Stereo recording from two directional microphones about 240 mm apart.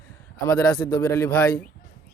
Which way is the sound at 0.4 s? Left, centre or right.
Centre.